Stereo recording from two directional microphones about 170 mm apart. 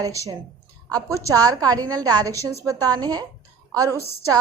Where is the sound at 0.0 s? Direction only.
20° right (ahead or behind).